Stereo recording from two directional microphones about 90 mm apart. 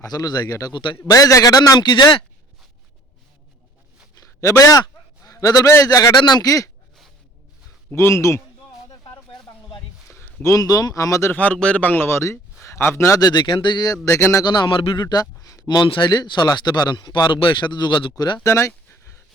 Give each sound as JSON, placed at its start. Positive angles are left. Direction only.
{"t": 0.0, "sound": "speech", "side_deg": 45}
{"t": 0.7, "sound": "speech", "side_deg": 65}
{"t": 1.0, "sound": "speech", "side_deg": 40}
{"t": 1.8, "sound": "speech", "side_deg": 55}
{"t": 4.2, "sound": "a sound", "side_deg": 35}
{"t": 5.2, "sound": "speech", "side_deg": 40}
{"t": 7.9, "sound": "speech", "side_deg": 35}
{"t": 10.2, "sound": "a man's voice", "side_deg": 35}
{"t": 11.3, "sound": "a man's voice", "side_deg": 15}
{"t": 13.1, "sound": "speech", "side_deg": 50}
{"t": 14.4, "sound": "speech", "side_deg": 55}
{"t": 15.0, "sound": "speech", "side_deg": 45}
{"t": 18.4, "sound": "a sound", "side_deg": 30}